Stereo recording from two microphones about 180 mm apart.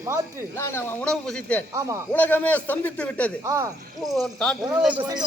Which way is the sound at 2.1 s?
10° left (ahead or behind).